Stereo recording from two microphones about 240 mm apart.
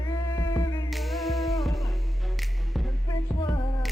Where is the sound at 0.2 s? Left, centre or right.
Centre.